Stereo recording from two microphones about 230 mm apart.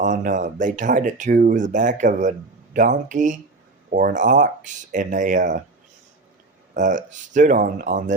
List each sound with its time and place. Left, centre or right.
0.0 s speech: right
6.7 s speech: right